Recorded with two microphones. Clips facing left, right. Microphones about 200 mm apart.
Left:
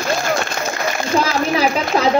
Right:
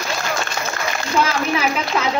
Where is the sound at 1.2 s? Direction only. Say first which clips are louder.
Left 2 dB; 35° left (ahead or behind).